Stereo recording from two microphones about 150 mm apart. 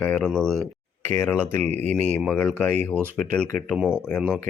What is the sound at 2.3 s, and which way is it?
Speech, 10° left (ahead or behind).